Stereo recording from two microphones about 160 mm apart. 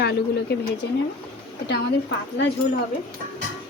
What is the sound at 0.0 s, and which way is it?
Speech, 90° left.